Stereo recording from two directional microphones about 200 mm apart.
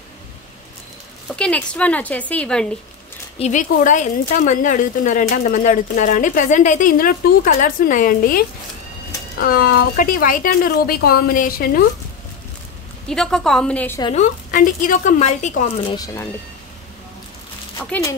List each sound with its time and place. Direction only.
1.3 s speech: 5° left (ahead or behind)
3.3 s a woman's voice: 35° left (ahead or behind)
13.1 s a woman's voice: 5° left (ahead or behind)
14.1 s a woman's voice: 45° left (ahead or behind)
15.9 s speech: 20° left (ahead or behind)
17.7 s speech: 10° left (ahead or behind)